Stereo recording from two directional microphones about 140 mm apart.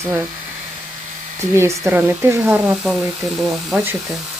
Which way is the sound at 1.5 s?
20° right (ahead or behind).